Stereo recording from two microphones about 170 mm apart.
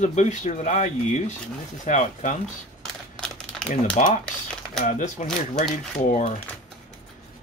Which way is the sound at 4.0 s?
45° left (ahead or behind).